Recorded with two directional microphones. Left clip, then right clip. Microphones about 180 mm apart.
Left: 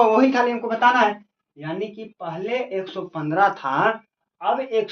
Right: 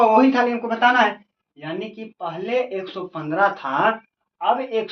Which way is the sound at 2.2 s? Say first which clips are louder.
Right 3 dB; 25° left (ahead or behind).